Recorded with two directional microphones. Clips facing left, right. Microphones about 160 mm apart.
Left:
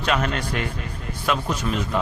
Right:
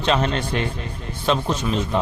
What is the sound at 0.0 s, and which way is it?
A man's voice, 25° right (ahead or behind).